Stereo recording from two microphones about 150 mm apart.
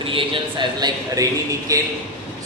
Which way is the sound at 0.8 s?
25° right (ahead or behind).